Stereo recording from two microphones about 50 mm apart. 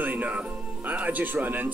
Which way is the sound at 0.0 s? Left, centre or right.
Right.